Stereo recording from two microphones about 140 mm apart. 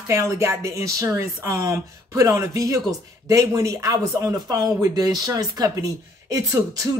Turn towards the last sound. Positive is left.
turn(degrees=-25)  # may be behind; listen again after turning